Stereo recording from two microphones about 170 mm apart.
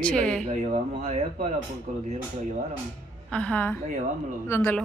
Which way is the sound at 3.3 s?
5° left (ahead or behind).